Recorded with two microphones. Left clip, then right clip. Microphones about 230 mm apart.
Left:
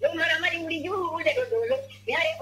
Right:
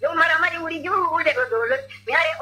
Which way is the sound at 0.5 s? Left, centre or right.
Centre.